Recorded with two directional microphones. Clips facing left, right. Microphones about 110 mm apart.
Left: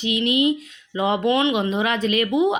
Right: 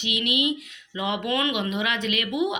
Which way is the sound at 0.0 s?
35° left (ahead or behind).